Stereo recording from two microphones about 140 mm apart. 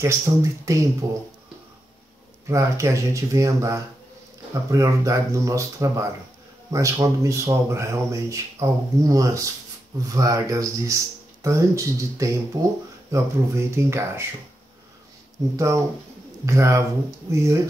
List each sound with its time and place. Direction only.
0.0 s speech: 20° right (ahead or behind)
2.4 s speech: 20° right (ahead or behind)
15.5 s speech: 20° right (ahead or behind)